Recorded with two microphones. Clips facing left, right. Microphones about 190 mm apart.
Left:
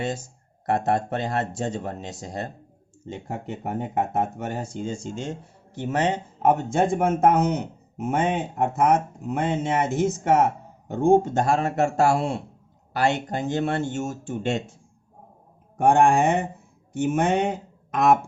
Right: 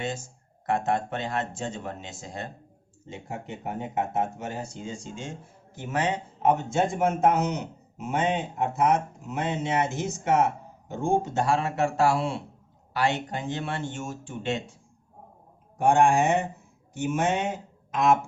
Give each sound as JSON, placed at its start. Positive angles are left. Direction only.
{"t": 0.6, "sound": "speech", "side_deg": 40}
{"t": 3.1, "sound": "speech", "side_deg": 50}
{"t": 5.2, "sound": "speech", "side_deg": 40}
{"t": 15.8, "sound": "speech", "side_deg": 55}